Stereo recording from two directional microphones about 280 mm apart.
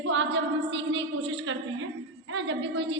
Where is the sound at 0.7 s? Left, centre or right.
Right.